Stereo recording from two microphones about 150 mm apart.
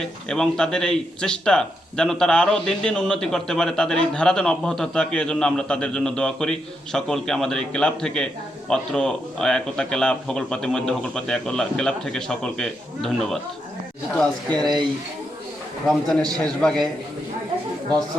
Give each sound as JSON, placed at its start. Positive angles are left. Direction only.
{"t": 0.0, "sound": "speech", "side_deg": 5}
{"t": 14.5, "sound": "speech", "side_deg": -30}
{"t": 15.9, "sound": "speech", "side_deg": 5}